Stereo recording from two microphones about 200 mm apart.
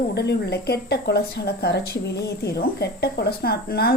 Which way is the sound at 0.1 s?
55° left (ahead or behind).